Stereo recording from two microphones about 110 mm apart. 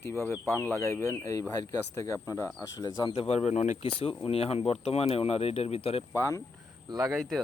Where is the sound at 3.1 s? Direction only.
65° left (ahead or behind).